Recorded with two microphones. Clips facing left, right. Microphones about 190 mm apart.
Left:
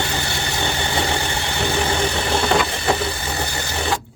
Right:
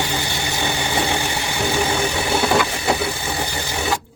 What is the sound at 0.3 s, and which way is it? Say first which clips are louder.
Vehicle: even; 10° right (ahead or behind).